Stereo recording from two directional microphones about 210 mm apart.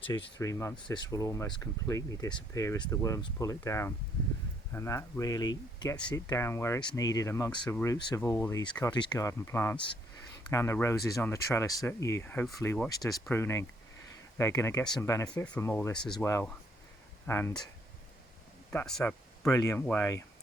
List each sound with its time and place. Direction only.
0.0 s speech: 15° left (ahead or behind)
12.9 s speech: 15° left (ahead or behind)
18.7 s speech: 5° left (ahead or behind)